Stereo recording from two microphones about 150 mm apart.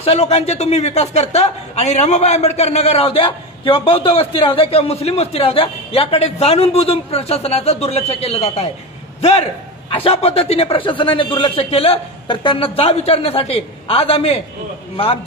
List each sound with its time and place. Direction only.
0.0 s a man's voice: 45° left (ahead or behind)